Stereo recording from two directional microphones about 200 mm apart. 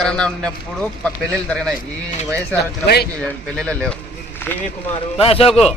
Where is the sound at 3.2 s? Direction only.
5° left (ahead or behind).